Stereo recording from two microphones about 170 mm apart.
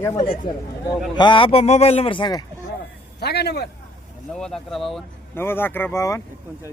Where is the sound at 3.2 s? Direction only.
75° left (ahead or behind).